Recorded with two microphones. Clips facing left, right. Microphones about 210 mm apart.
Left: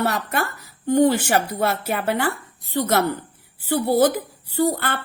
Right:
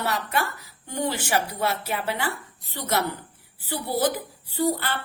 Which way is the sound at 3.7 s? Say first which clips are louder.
Left 7 dB; 50° left (ahead or behind).